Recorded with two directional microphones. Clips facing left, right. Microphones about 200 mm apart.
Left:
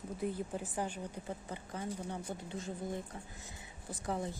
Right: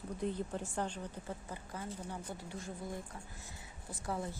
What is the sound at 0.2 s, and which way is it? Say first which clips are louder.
A woman's voice: even; 5° left (ahead or behind).